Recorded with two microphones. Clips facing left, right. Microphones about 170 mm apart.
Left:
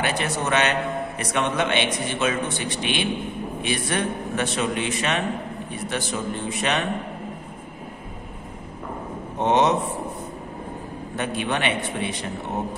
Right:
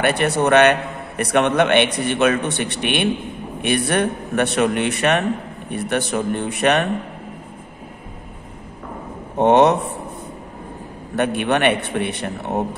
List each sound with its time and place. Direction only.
0.0 s a man's voice: 60° right (ahead or behind)
9.4 s a man's voice: 60° right (ahead or behind)
11.1 s a man's voice: 65° right (ahead or behind)